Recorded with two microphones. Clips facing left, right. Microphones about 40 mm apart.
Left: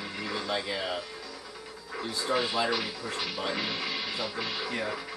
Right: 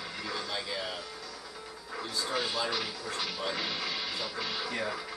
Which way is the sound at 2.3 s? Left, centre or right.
Centre.